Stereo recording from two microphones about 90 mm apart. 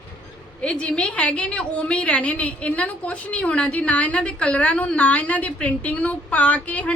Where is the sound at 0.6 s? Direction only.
10° left (ahead or behind).